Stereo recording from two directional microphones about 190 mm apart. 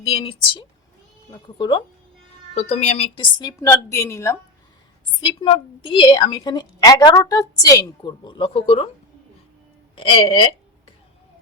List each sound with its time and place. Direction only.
0.0 s a woman's voice: 30° left (ahead or behind)
2.6 s a woman's voice: 35° left (ahead or behind); by 4.4 s 15° left (ahead or behind)
5.2 s a woman's voice: 25° left (ahead or behind)
9.9 s a woman's voice: 25° left (ahead or behind)